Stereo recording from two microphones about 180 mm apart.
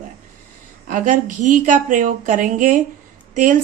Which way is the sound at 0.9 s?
45° right (ahead or behind).